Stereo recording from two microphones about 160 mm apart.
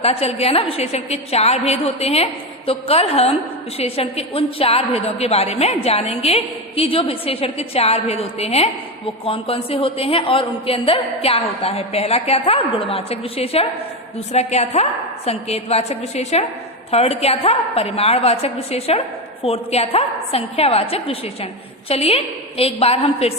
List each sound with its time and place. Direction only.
0.0 s a woman's voice: 40° left (ahead or behind)